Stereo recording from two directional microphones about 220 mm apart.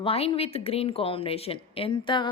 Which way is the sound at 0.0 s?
25° left (ahead or behind).